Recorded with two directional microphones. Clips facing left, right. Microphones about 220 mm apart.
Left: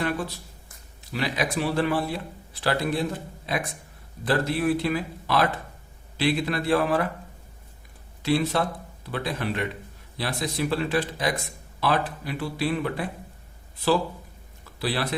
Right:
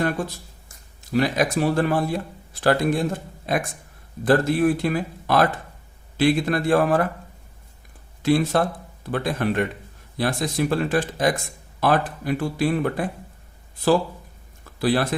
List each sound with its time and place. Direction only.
1.1 s speech: 45° right (ahead or behind)
8.2 s speech: 50° right (ahead or behind)
14.6 s a sound: 50° right (ahead or behind)